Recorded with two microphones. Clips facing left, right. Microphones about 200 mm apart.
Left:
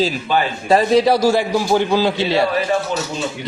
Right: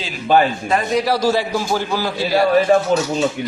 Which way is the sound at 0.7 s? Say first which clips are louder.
Left 5 dB; 35° left (ahead or behind).